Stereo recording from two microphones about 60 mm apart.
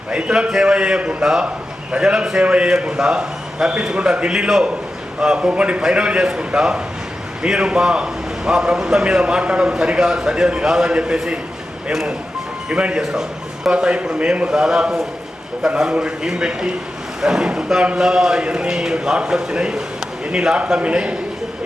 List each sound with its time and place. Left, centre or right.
0.1 s a man's voice: centre